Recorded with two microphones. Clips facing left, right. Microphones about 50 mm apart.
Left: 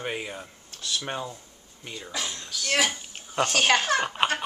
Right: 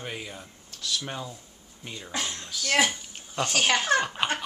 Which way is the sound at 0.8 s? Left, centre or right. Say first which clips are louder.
Left 2 dB; left.